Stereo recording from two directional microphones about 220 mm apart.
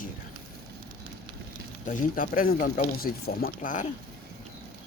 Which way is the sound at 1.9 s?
35° left (ahead or behind).